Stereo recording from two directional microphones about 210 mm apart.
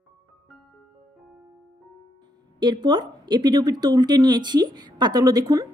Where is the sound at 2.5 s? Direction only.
20° right (ahead or behind).